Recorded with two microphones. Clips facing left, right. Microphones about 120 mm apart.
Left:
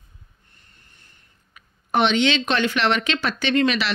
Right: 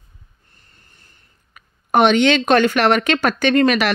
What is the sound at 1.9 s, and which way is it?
Speech, 50° right (ahead or behind).